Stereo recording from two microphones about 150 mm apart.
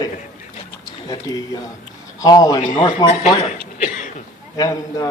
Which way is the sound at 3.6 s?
60° left (ahead or behind).